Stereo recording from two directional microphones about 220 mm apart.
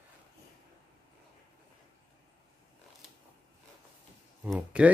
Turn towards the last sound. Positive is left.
turn(degrees=-5)  # may be behind; listen again after turning